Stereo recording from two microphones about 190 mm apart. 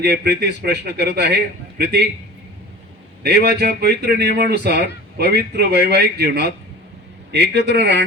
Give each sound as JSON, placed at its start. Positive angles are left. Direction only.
{"t": 0.0, "sound": "speech", "side_deg": -55}
{"t": 3.2, "sound": "speech", "side_deg": -55}